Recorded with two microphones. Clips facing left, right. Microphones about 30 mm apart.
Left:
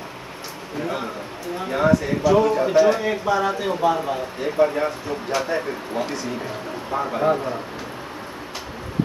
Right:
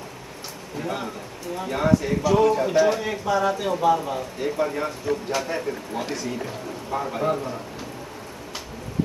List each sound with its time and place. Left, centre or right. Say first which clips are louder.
0.7 s a man's voice: left 3 dB; centre